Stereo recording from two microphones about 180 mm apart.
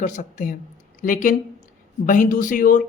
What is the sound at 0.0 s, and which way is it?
Speech, 45° left (ahead or behind).